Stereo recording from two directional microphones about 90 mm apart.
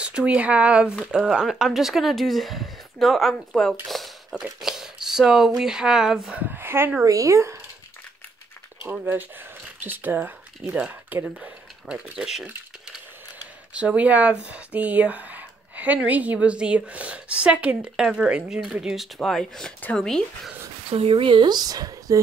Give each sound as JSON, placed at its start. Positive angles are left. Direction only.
{"t": 0.0, "sound": "speech", "side_deg": -15}
{"t": 6.4, "sound": "a sound", "side_deg": -25}
{"t": 7.1, "sound": "speech", "side_deg": -35}
{"t": 8.8, "sound": "speech", "side_deg": -25}
{"t": 11.9, "sound": "speech", "side_deg": -5}
{"t": 13.7, "sound": "speech", "side_deg": -15}
{"t": 19.1, "sound": "speech", "side_deg": 5}
{"t": 20.9, "sound": "speech", "side_deg": -90}